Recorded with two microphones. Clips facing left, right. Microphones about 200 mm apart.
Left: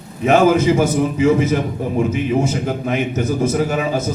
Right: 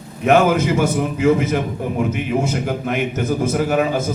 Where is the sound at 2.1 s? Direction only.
60° right (ahead or behind).